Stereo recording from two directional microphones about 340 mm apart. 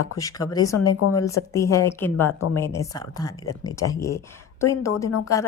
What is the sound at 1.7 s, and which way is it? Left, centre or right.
A woman's voice, centre.